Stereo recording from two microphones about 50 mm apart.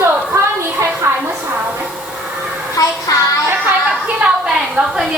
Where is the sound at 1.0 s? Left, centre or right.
Right.